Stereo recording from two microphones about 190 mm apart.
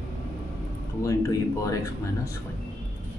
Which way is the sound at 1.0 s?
15° left (ahead or behind).